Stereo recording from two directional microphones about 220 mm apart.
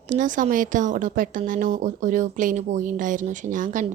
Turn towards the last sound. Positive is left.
turn(degrees=-35)  # may be behind; listen again after turning